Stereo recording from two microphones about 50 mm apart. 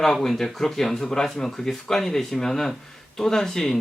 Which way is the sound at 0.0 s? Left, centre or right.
Centre.